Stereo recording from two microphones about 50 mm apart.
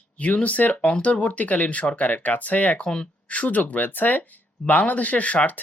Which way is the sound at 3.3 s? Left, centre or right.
Left.